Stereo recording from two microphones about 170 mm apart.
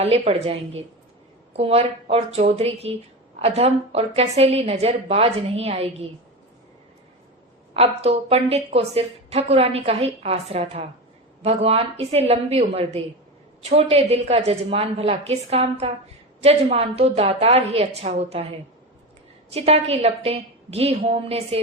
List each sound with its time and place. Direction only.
0.0 s a woman's voice: 35° right (ahead or behind)
7.7 s a woman's voice: 35° right (ahead or behind)
19.5 s a woman's voice: 35° right (ahead or behind)